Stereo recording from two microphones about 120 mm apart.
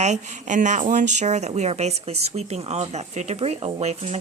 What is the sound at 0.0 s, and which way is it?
Speech, 85° right.